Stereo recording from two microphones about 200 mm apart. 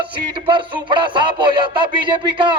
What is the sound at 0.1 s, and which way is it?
Music, 25° right (ahead or behind).